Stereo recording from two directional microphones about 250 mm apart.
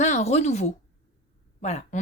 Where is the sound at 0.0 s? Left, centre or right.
Left.